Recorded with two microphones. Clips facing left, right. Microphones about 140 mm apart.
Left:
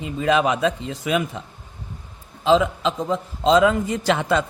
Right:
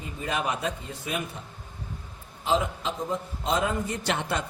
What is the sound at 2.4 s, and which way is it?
A man's voice, 90° left.